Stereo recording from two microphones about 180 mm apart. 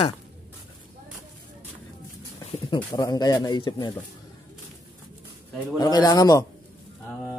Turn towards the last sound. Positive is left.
turn(degrees=20)  # may be behind; listen again after turning